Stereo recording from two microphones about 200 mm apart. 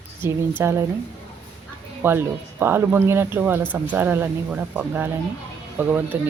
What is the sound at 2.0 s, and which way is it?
Speech, 10° right (ahead or behind).